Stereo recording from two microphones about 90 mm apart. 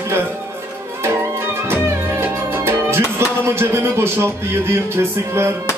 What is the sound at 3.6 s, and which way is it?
A man's voice, 25° right (ahead or behind).